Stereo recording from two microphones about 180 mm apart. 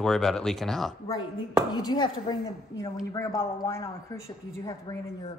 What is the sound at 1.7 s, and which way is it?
Speech, 25° left (ahead or behind).